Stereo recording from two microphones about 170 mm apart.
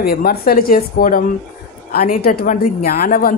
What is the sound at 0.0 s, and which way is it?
A woman's voice, 65° left (ahead or behind).